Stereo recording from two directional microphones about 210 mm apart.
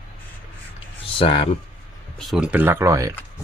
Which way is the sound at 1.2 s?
25° left (ahead or behind).